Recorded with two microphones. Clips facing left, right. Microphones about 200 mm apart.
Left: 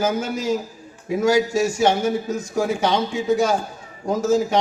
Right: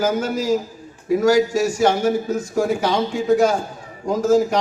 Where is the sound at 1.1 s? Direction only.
25° left (ahead or behind).